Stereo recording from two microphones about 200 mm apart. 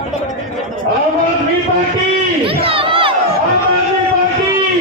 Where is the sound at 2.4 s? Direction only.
25° right (ahead or behind).